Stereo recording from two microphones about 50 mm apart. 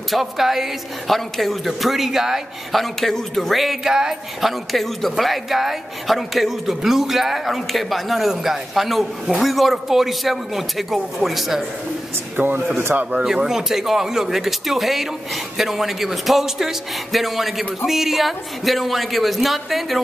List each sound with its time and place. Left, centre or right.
0.1 s a woman's voice: centre
3.9 s speech: centre
4.4 s a woman's voice: centre
12.4 s speech: right
13.1 s a woman's voice: centre